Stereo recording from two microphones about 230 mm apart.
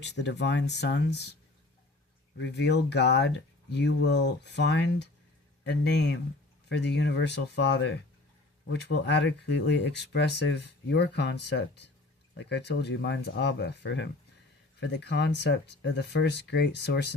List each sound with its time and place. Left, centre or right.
0.0 s speech: left
2.4 s speech: left